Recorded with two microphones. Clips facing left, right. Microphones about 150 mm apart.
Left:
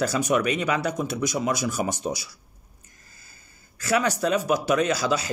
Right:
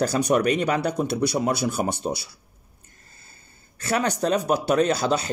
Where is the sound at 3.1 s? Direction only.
30° right (ahead or behind).